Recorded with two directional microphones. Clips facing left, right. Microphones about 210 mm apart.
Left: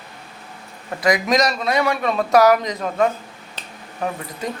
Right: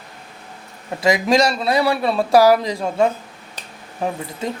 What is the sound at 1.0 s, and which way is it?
Speech, 25° right (ahead or behind).